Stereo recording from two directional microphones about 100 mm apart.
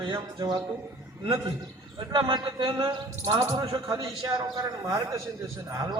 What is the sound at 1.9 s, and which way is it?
Speech, 55° right (ahead or behind).